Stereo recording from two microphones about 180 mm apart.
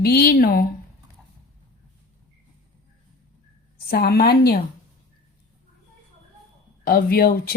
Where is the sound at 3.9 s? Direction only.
60° left (ahead or behind).